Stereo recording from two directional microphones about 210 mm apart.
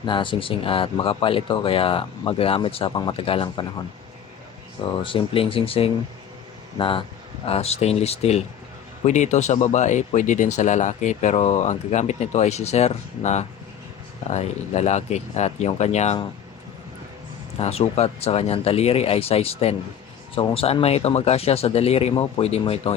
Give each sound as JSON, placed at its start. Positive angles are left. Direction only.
{"t": 0.0, "sound": "speech", "side_deg": 20}
{"t": 5.0, "sound": "speech", "side_deg": 25}
{"t": 17.6, "sound": "speech", "side_deg": 30}